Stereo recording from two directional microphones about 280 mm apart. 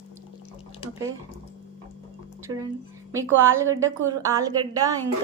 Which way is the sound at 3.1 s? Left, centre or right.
Centre.